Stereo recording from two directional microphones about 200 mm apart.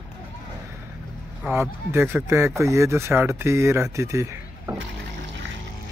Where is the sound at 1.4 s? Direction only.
10° right (ahead or behind).